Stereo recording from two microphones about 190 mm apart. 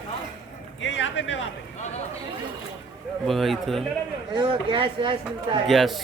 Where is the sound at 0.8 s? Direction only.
75° left (ahead or behind).